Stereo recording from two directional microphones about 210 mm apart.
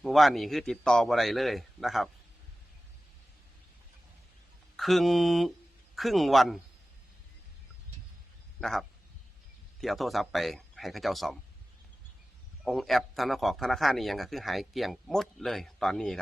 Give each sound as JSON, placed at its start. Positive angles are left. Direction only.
{"t": 0.0, "sound": "a man's voice", "side_deg": 0}
{"t": 4.8, "sound": "a man's voice", "side_deg": 0}
{"t": 8.6, "sound": "a man's voice", "side_deg": 0}
{"t": 12.6, "sound": "a man's voice", "side_deg": 0}